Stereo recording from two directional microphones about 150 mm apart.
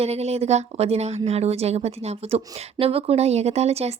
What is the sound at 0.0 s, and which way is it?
A woman's voice, 45° right (ahead or behind).